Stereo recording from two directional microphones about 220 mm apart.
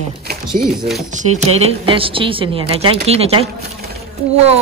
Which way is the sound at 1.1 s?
30° right (ahead or behind).